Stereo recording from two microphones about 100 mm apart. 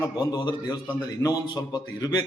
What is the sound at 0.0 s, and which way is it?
A man's voice, 40° left (ahead or behind).